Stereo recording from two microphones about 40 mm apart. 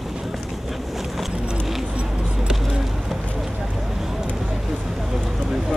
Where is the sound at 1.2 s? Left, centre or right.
Centre.